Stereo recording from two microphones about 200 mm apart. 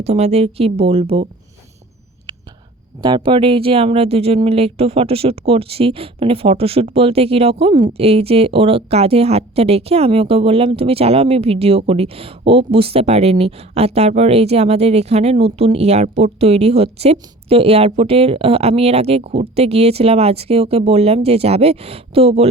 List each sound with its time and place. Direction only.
0.0 s a woman's voice: 30° right (ahead or behind)
3.0 s a woman's voice: 25° right (ahead or behind)